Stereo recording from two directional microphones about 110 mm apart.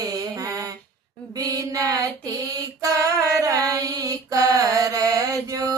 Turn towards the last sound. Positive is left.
turn(degrees=-30)  # may be behind; listen again after turning